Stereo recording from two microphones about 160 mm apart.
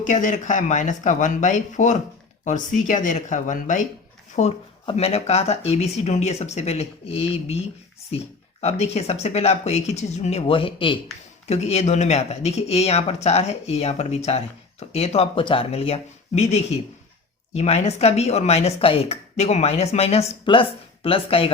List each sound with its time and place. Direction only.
0.0 s speech: 50° left (ahead or behind)
4.4 s speech: 40° left (ahead or behind)
8.6 s speech: 40° left (ahead or behind)
11.4 s speech: 40° left (ahead or behind)